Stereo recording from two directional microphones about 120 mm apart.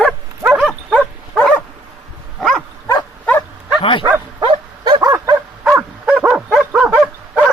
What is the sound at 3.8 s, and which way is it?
Speech, 45° left (ahead or behind).